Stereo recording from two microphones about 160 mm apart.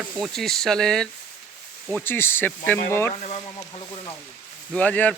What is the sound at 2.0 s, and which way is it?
Speech, 15° left (ahead or behind).